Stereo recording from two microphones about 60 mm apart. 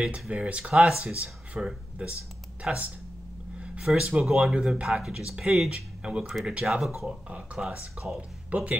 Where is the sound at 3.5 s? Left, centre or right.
Centre.